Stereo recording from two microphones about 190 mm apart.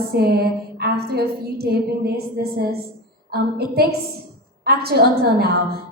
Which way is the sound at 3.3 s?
55° right (ahead or behind).